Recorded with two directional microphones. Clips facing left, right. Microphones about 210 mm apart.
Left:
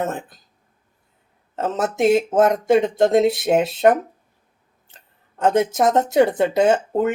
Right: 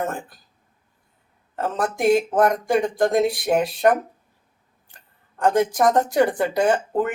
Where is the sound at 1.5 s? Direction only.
20° left (ahead or behind).